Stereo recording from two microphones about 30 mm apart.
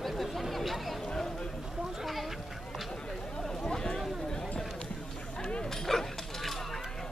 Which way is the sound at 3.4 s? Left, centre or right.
Centre.